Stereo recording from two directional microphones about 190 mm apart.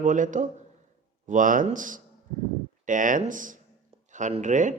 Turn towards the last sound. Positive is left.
turn(degrees=-40)  # may be behind; listen again after turning